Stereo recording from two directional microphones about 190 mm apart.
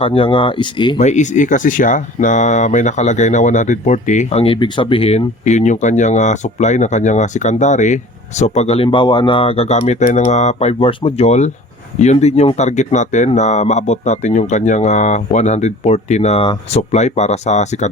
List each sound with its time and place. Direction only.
0.0 s speech: 30° left (ahead or behind)
0.9 s speech: 40° left (ahead or behind)